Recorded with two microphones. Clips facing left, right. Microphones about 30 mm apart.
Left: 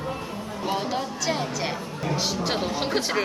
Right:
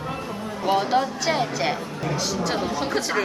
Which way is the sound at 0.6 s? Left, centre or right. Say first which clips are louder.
Right 7 dB; centre.